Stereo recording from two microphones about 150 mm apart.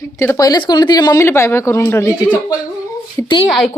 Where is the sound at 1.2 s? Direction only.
15° left (ahead or behind).